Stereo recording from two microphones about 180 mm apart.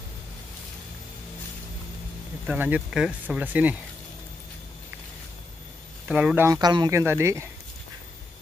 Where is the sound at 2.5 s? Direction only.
10° right (ahead or behind).